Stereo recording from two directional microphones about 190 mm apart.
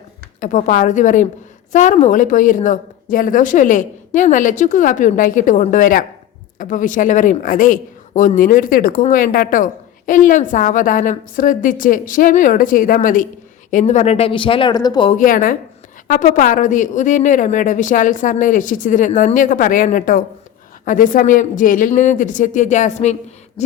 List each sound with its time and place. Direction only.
0.3 s a woman's voice: 40° left (ahead or behind); by 15.1 s 25° left (ahead or behind)
15.1 s a woman's voice: 45° left (ahead or behind)